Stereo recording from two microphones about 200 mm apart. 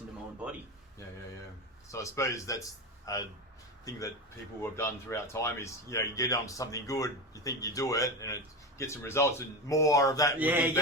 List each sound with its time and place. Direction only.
1.9 s speech: 15° left (ahead or behind)
10.3 s speech: 10° right (ahead or behind)